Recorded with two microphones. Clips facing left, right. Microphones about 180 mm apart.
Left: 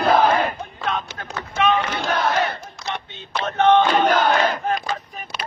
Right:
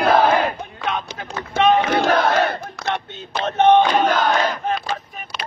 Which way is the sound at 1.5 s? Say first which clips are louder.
Right 4 dB; 30° right (ahead or behind).